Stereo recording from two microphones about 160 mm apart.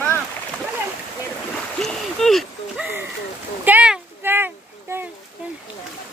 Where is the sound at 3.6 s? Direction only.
10° right (ahead or behind).